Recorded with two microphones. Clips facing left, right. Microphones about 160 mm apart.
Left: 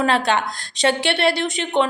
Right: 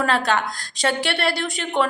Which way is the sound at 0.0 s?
25° left (ahead or behind).